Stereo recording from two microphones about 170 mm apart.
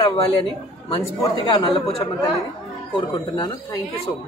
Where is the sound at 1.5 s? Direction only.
30° left (ahead or behind).